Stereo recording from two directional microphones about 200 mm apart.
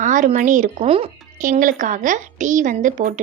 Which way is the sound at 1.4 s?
40° right (ahead or behind).